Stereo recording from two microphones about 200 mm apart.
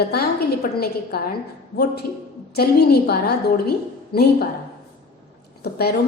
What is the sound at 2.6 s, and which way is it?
A woman's voice, 50° left (ahead or behind).